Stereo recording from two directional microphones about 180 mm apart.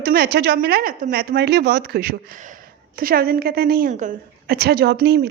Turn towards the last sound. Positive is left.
turn(degrees=-65)  # may be behind; listen again after turning